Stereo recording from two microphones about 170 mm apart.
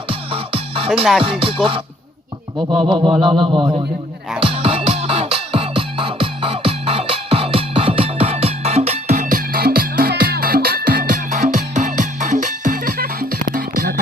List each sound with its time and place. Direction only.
0.1 s music: 30° right (ahead or behind)
2.7 s a sound: 30° right (ahead or behind)
4.4 s music: 30° right (ahead or behind); by 13.9 s 55° right (ahead or behind)